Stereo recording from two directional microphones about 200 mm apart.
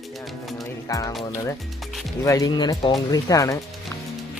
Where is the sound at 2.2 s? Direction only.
15° left (ahead or behind).